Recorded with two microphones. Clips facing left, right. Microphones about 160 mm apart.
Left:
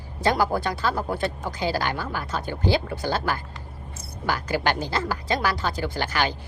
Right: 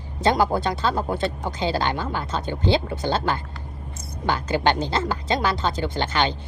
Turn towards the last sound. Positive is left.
turn(degrees=-25)  # may be behind; listen again after turning